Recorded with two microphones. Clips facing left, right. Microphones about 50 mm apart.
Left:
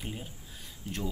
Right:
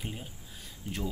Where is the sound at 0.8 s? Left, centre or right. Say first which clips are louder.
Even; centre.